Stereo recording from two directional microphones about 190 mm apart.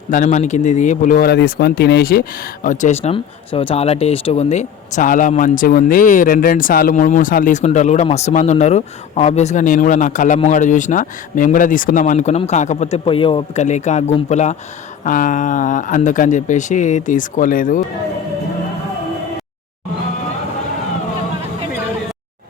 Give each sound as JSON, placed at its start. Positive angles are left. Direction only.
{"t": 0.1, "sound": "speech", "side_deg": 40}
{"t": 2.6, "sound": "speech", "side_deg": 35}